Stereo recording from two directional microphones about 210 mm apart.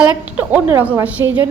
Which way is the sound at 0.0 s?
5° right (ahead or behind).